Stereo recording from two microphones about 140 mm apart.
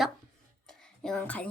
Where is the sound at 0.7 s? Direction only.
5° left (ahead or behind).